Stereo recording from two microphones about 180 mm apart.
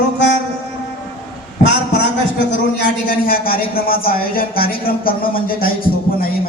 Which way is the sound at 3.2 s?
55° left (ahead or behind).